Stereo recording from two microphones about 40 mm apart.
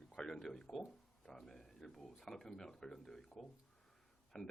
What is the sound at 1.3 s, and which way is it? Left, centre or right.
Speech, centre.